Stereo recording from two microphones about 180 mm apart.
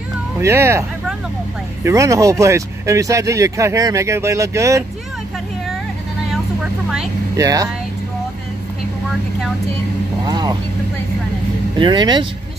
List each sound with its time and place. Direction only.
0.4 s speech: 15° right (ahead or behind)
1.9 s speech: 15° right (ahead or behind)
6.3 s vehicle: 5° right (ahead or behind)
7.3 s speech: 20° right (ahead or behind)
10.2 s speech: 20° right (ahead or behind)
11.8 s speech: 25° right (ahead or behind)